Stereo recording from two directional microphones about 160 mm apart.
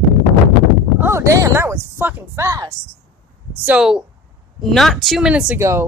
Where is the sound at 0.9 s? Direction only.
15° right (ahead or behind).